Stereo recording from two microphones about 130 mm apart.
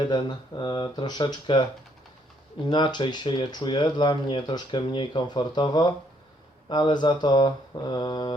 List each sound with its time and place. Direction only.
0.0 s speech: 35° left (ahead or behind)
2.6 s speech: 35° left (ahead or behind)